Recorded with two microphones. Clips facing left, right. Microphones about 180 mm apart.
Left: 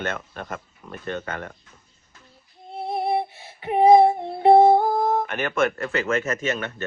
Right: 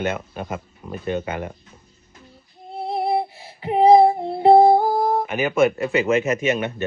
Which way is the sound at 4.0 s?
25° right (ahead or behind).